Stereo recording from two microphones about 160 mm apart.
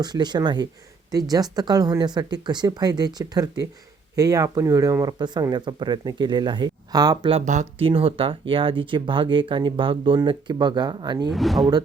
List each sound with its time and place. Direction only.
0.0 s speech: 25° right (ahead or behind)
7.3 s speech: 50° right (ahead or behind)
7.9 s speech: 35° right (ahead or behind)
11.3 s speech: centre (ahead or behind)